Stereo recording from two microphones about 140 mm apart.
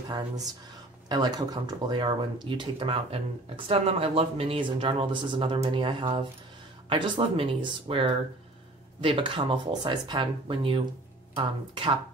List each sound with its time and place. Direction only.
1.0 s speech: 30° right (ahead or behind)